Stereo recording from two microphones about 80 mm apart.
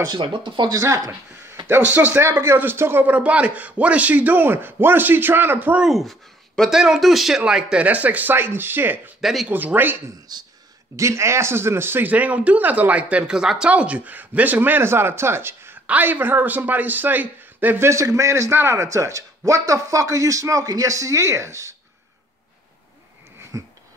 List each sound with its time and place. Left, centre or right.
0.1 s speech: right
0.7 s speech: right
1.7 s speech: right
5.8 s speech: centre; by 9.1 s right
9.2 s speech: centre
9.5 s speech: right
10.3 s speech: right
11.0 s speech: right
17.8 s a man's voice: right
23.5 s wheeze: right